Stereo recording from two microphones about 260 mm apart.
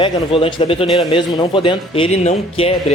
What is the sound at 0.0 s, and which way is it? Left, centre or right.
Speech, left.